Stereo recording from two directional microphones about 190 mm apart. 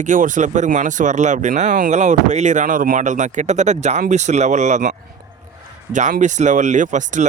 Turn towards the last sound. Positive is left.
turn(degrees=-40)  # may be behind; listen again after turning